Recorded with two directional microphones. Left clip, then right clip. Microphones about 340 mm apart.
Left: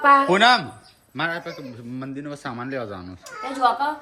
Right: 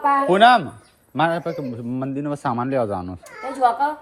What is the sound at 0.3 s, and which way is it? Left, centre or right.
A man's voice, centre.